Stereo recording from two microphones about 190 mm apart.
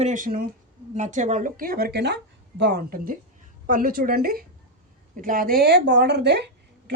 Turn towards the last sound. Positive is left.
turn(degrees=-60)  # may be behind; listen again after turning